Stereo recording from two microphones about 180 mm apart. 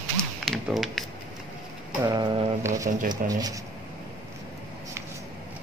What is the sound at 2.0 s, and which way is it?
Mantra, 20° right (ahead or behind).